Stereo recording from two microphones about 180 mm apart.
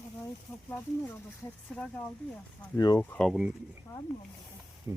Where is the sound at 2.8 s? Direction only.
20° left (ahead or behind).